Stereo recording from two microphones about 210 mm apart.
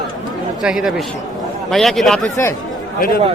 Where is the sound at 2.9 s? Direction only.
40° left (ahead or behind).